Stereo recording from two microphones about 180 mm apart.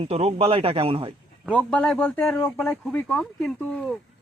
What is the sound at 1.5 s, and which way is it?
Speech, 5° left (ahead or behind).